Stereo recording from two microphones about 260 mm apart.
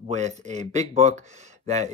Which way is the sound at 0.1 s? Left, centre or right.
Right.